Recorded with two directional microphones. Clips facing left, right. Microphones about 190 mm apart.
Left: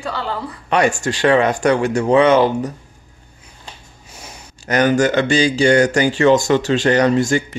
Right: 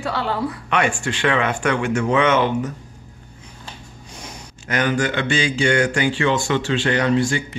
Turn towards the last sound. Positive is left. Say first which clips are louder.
# left 3 dB
turn(degrees=45)  # may be behind; listen again after turning